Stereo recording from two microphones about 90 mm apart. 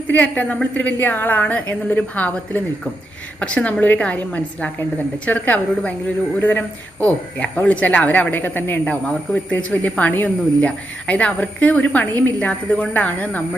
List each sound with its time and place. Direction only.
0.1 s speech: 15° left (ahead or behind)